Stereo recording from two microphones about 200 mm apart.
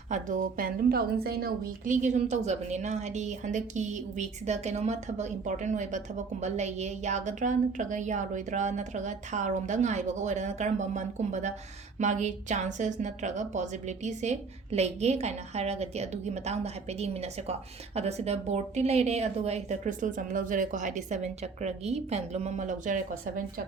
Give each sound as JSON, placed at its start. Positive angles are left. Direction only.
{"t": 0.1, "sound": "a woman's voice", "side_deg": -40}